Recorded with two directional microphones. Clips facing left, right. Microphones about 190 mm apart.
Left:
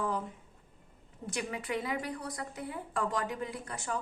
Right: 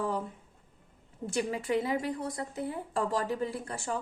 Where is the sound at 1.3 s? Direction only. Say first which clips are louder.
Right 5 dB; 30° right (ahead or behind).